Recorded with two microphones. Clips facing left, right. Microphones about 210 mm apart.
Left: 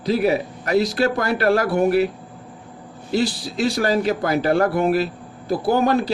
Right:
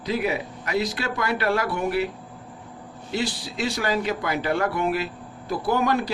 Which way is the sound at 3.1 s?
40° left (ahead or behind).